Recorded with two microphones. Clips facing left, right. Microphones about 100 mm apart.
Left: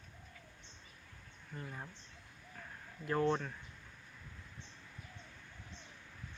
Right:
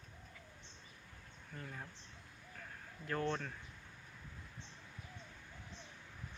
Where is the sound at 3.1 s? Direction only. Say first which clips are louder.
Left 5 dB; 20° left (ahead or behind).